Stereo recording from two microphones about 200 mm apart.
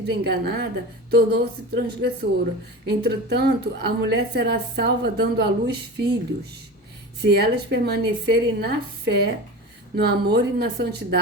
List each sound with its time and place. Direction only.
0.0 s a woman's voice: 55° right (ahead or behind)
7.2 s a woman's voice: 55° right (ahead or behind)